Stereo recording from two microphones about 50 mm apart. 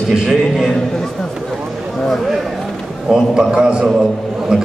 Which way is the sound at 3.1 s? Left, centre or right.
Centre.